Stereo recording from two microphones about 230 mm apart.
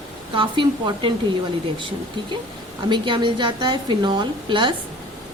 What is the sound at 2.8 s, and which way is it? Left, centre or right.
A woman's voice, right.